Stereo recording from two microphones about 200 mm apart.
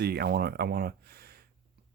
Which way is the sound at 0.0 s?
55° right (ahead or behind).